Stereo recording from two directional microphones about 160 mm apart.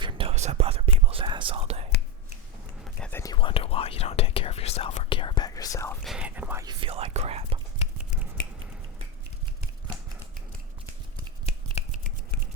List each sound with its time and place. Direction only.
0.0 s whispering: 35° right (ahead or behind)
2.8 s whispering: 10° left (ahead or behind)
3.3 s whispering: 35° left (ahead or behind)
6.0 s whispering: 5° right (ahead or behind)
6.7 s whispering: 30° right (ahead or behind)